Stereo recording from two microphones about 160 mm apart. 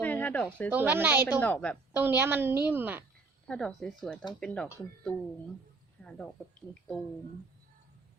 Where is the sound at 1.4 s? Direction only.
10° left (ahead or behind).